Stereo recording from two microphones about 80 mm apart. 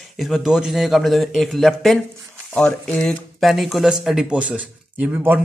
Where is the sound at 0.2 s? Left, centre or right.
Centre.